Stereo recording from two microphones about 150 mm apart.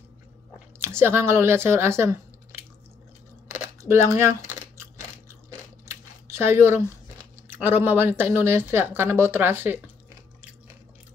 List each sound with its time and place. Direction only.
0.7 s speech: 15° right (ahead or behind)
3.4 s a sound: 20° right (ahead or behind)
5.3 s speech: 20° right (ahead or behind)